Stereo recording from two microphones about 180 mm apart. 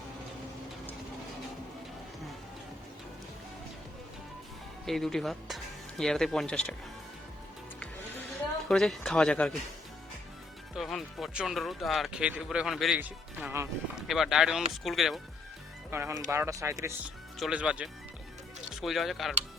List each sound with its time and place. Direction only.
4.9 s speech: centre (ahead or behind)
8.7 s speech: centre (ahead or behind)
10.8 s speech: centre (ahead or behind)
15.9 s speech: 15° right (ahead or behind)
17.4 s speech: 5° right (ahead or behind)